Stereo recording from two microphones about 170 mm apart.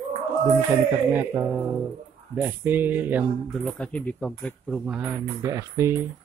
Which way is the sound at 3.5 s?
Centre (ahead or behind).